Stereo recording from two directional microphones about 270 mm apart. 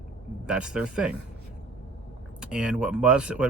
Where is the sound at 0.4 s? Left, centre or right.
Centre.